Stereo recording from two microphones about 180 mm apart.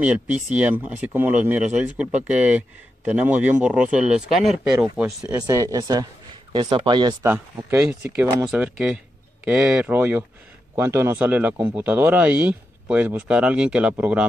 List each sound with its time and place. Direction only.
0.0 s speech: 5° right (ahead or behind)
5.3 s speech: 15° right (ahead or behind)
7.2 s speech: 10° right (ahead or behind)